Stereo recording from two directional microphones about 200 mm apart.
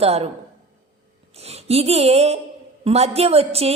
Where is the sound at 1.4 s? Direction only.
30° right (ahead or behind).